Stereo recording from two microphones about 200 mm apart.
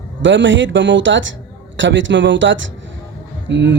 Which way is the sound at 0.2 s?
65° right (ahead or behind).